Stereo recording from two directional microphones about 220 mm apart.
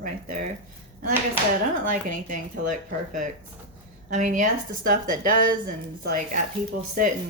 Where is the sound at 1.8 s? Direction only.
40° right (ahead or behind).